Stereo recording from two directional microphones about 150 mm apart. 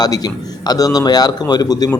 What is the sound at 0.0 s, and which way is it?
Speech, 25° left (ahead or behind).